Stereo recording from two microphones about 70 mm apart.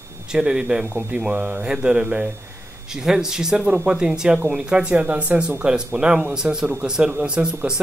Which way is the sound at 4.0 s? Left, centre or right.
Centre.